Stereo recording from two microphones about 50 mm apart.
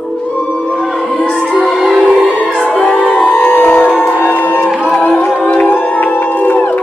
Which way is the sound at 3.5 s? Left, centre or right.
Left.